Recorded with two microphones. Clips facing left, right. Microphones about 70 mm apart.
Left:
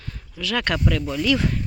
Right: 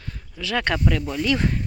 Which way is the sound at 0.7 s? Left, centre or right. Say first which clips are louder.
Even; centre.